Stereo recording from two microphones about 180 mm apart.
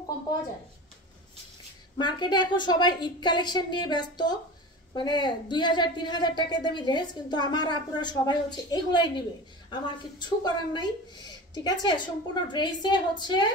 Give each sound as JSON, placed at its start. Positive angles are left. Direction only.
{"t": 2.0, "sound": "speech", "side_deg": 25}